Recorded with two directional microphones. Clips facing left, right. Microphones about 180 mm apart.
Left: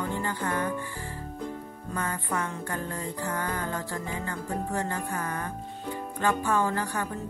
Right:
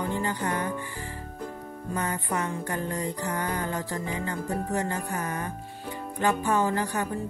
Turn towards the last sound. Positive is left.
turn(degrees=-15)  # may be behind; listen again after turning